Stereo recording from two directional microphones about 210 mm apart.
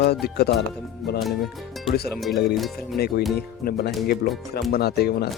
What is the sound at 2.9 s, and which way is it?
Speech, 45° left (ahead or behind).